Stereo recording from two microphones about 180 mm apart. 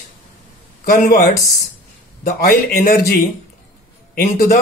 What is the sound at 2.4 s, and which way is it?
Speech, 55° left (ahead or behind).